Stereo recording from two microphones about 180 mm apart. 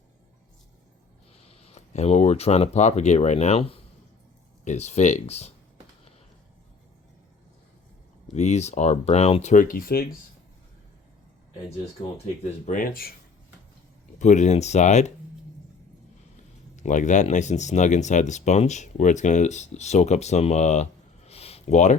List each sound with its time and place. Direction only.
1.5 s speech: 35° left (ahead or behind)
8.3 s speech: 40° left (ahead or behind); by 10.1 s 55° left (ahead or behind)
12.1 s speech: 40° left (ahead or behind)
14.2 s speech: 40° left (ahead or behind)
16.7 s speech: 45° left (ahead or behind)
21.2 s a sound: 35° left (ahead or behind)